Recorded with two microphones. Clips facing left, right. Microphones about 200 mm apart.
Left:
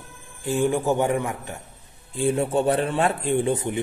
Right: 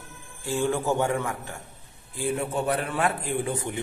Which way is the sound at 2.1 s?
30° left (ahead or behind).